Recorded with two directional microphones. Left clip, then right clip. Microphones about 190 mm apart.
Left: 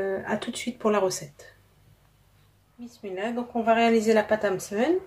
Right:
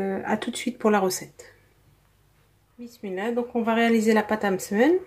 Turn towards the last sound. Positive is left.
turn(degrees=-40)  # may be behind; listen again after turning